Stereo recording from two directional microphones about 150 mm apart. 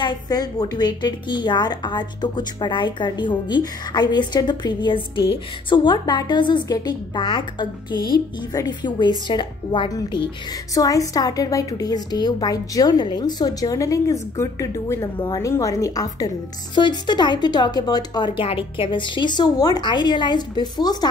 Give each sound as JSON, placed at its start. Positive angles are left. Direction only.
{"t": 0.0, "sound": "a woman's voice", "side_deg": 25}